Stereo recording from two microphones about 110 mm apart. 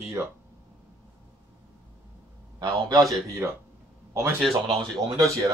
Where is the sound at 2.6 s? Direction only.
35° right (ahead or behind).